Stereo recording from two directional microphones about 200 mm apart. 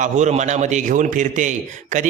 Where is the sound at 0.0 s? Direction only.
35° right (ahead or behind).